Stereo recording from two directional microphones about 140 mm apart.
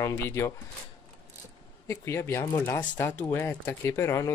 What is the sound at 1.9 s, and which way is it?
Speech, 20° left (ahead or behind).